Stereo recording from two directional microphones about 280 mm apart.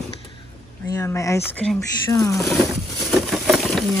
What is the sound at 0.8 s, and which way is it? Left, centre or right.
Speech, centre.